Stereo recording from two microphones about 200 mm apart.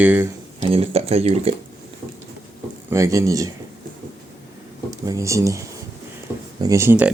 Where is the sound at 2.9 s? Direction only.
15° right (ahead or behind).